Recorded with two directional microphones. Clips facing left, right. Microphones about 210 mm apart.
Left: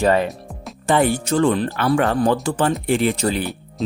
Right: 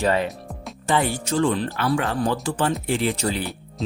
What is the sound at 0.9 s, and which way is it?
Speech, 55° left (ahead or behind).